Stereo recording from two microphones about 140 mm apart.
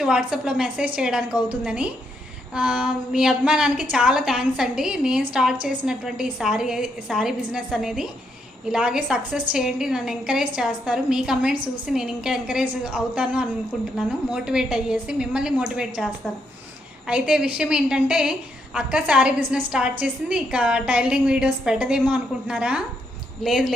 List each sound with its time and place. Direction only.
0.0 s a woman's voice: 5° right (ahead or behind)
17.1 s a woman's voice: 5° right (ahead or behind)